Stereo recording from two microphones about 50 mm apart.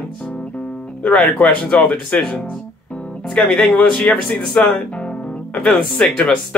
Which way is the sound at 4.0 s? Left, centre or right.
Left.